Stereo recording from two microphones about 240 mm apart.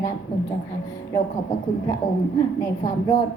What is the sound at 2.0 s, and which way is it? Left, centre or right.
Speech, left.